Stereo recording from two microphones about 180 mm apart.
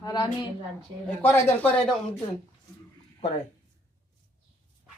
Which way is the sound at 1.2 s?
10° left (ahead or behind).